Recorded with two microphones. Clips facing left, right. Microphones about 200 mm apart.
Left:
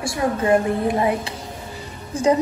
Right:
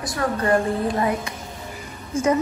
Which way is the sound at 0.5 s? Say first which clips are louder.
Left 3 dB; 20° left (ahead or behind).